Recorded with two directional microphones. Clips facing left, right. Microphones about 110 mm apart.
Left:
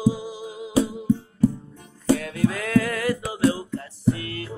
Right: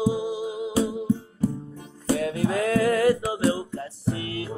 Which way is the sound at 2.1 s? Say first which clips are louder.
Left 1 dB; 25° right (ahead or behind).